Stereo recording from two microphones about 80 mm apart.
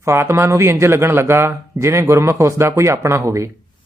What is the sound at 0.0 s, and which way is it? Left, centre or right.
Speech, right.